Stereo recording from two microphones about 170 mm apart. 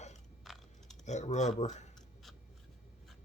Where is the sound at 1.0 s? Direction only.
45° left (ahead or behind).